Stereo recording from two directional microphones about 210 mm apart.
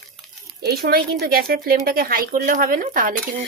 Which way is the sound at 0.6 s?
50° right (ahead or behind).